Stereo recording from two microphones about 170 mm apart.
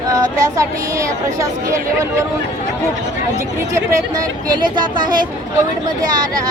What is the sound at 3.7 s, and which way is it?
Speech, 25° right (ahead or behind).